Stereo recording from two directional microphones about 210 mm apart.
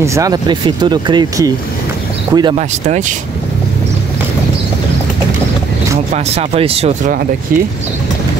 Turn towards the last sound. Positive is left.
turn(degrees=-30)  # may be behind; listen again after turning